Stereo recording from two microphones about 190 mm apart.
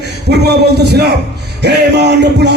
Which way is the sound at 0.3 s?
60° right (ahead or behind).